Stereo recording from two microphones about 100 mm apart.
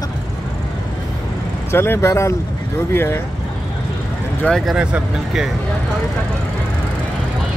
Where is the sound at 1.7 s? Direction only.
25° left (ahead or behind).